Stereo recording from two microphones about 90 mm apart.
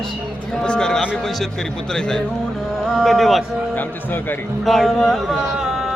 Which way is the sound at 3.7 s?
20° left (ahead or behind).